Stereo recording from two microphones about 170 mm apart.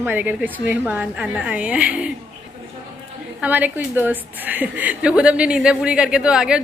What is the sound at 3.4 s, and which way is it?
A woman's voice, 10° right (ahead or behind).